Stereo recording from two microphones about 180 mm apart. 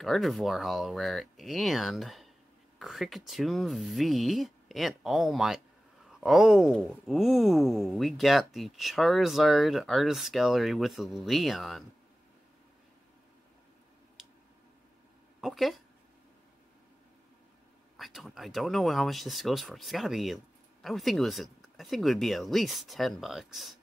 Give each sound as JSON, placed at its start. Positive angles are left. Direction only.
{"t": 0.0, "sound": "speech", "side_deg": 0}
{"t": 14.2, "sound": "tick", "side_deg": 0}
{"t": 15.4, "sound": "speech", "side_deg": 0}
{"t": 17.9, "sound": "speech", "side_deg": 0}